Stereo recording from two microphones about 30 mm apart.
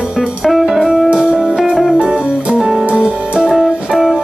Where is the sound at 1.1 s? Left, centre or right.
Right.